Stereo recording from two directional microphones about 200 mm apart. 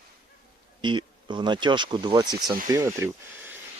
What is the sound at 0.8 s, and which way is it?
Speech, 25° right (ahead or behind).